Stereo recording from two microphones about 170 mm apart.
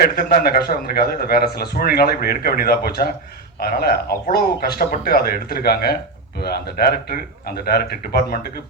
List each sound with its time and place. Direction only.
0.0 s speech: 65° left (ahead or behind)